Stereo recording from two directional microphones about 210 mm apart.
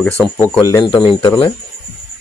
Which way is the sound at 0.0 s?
5° left (ahead or behind).